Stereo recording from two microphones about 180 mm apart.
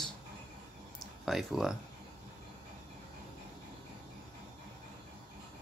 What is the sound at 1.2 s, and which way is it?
Speech, centre (ahead or behind).